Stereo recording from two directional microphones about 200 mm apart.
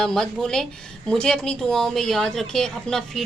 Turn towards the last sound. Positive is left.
turn(degrees=0)  # may be behind; listen again after turning